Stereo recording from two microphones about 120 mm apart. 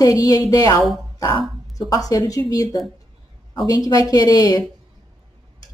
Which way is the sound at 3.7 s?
35° left (ahead or behind).